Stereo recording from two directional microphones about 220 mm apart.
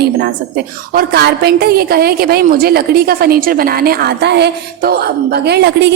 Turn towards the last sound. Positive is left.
turn(degrees=-50)  # may be behind; listen again after turning